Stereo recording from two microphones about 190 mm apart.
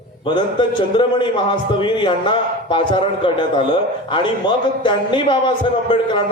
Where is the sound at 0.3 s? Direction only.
25° left (ahead or behind).